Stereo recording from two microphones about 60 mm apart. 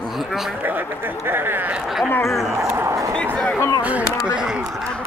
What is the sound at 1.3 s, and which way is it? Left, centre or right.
Speech, right.